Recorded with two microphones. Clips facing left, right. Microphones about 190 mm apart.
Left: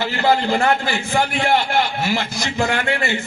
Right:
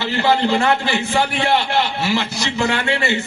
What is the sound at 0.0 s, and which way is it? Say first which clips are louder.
A man's voice: right 1 dB; 50° left (ahead or behind).